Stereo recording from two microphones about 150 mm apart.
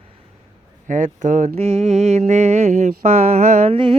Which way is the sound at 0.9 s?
55° right (ahead or behind).